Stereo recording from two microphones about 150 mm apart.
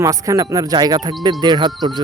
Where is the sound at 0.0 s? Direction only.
20° right (ahead or behind).